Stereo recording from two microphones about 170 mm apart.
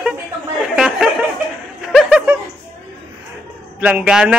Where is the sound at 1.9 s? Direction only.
Centre (ahead or behind).